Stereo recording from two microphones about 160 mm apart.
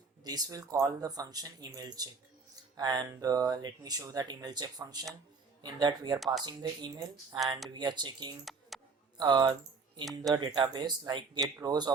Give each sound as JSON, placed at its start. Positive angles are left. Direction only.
{"t": 0.3, "sound": "speech", "side_deg": -25}
{"t": 6.1, "sound": "speech", "side_deg": 0}
{"t": 6.4, "sound": "speech", "side_deg": -25}
{"t": 8.7, "sound": "a sound", "side_deg": 0}
{"t": 9.1, "sound": "speech", "side_deg": -25}